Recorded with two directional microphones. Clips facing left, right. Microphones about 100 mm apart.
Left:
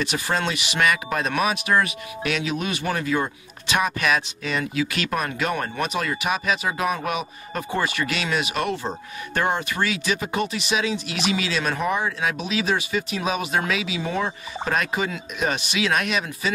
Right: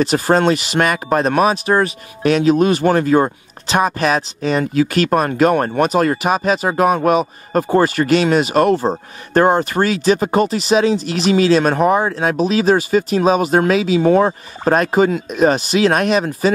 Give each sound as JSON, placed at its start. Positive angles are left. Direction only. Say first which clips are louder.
{"t": 0.0, "sound": "speech", "louder": "right 11 dB", "side_deg": -40}